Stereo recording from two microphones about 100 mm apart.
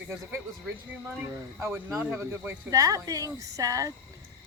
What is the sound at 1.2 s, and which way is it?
Speech, 20° right (ahead or behind).